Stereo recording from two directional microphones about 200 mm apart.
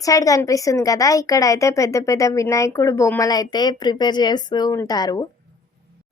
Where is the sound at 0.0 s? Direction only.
15° left (ahead or behind).